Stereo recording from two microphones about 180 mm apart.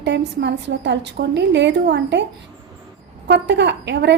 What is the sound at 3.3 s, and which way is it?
Speech, 75° right (ahead or behind).